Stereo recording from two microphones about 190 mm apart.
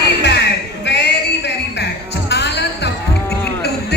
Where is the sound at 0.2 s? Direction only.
60° left (ahead or behind).